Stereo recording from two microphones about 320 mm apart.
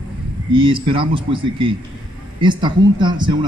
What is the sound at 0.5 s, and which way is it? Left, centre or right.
A man's voice, centre.